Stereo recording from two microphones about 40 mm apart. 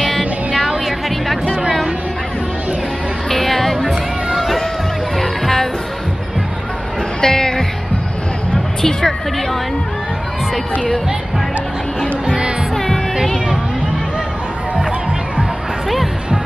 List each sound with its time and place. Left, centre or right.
0.6 s music: centre
3.3 s music: centre
5.2 s music: centre
7.2 s music: centre
8.8 s music: centre
12.7 s music: centre